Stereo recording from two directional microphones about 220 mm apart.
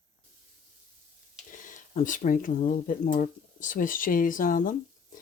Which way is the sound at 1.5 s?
35° left (ahead or behind).